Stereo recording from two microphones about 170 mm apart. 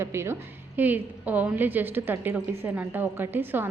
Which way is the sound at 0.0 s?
15° right (ahead or behind).